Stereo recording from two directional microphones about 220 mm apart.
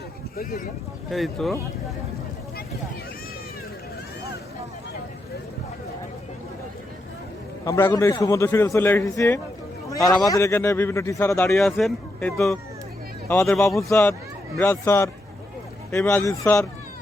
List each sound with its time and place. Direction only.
0.3 s speech: 40° left (ahead or behind)
1.1 s speech: centre (ahead or behind)
7.6 s speech: 10° left (ahead or behind)
10.2 s speech: 15° left (ahead or behind)